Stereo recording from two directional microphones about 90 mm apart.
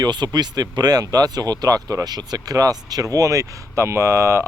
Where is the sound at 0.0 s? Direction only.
50° right (ahead or behind).